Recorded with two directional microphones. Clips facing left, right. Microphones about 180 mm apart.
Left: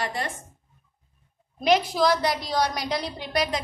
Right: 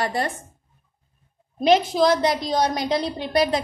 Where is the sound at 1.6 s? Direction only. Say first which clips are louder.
Right 4 dB; 25° right (ahead or behind).